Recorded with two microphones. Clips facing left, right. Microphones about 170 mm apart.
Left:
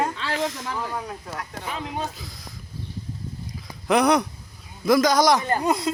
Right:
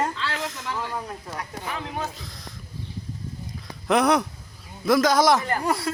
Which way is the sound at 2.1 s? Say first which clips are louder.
Even; centre (ahead or behind).